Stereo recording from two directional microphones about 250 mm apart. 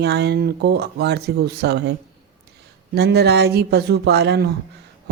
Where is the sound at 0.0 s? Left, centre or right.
Right.